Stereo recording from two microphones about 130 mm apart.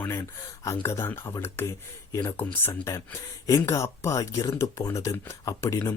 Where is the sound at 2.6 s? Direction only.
20° left (ahead or behind).